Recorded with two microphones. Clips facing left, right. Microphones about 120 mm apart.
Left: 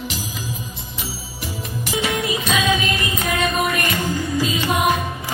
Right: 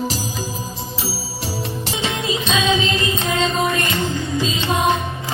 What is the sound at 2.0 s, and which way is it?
Music, 25° right (ahead or behind).